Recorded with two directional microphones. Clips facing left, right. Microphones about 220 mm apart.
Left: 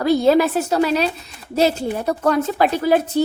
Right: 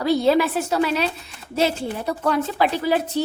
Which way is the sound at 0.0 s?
50° left (ahead or behind).